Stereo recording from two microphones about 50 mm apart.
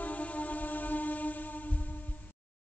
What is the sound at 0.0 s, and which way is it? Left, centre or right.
Music, left.